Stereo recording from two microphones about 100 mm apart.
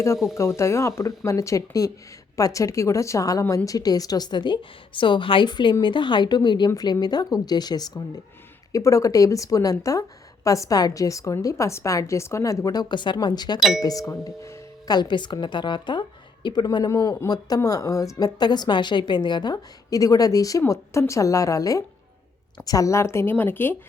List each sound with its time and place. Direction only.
0.3 s a woman's voice: 30° left (ahead or behind)
8.7 s speech: 30° left (ahead or behind)
13.6 s speech: centre (ahead or behind)
13.8 s speech: 35° left (ahead or behind)
14.8 s a woman's voice: 45° left (ahead or behind)
16.6 s speech: 35° left (ahead or behind); by 23.7 s 20° left (ahead or behind)